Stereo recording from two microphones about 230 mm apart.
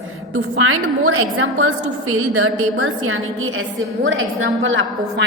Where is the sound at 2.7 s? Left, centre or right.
Right.